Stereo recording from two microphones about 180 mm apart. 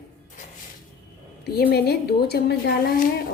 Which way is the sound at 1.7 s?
60° left (ahead or behind).